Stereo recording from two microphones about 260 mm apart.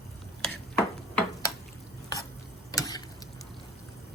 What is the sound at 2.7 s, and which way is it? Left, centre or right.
Tick-tock, centre.